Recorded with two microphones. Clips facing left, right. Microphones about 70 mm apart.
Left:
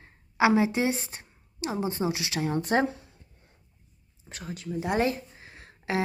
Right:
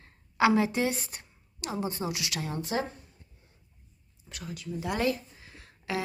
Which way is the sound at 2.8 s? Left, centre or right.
Left.